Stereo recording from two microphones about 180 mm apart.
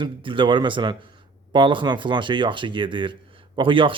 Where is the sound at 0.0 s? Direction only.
30° right (ahead or behind).